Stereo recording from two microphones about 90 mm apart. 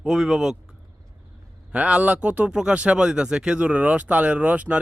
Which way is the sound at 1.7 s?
15° right (ahead or behind).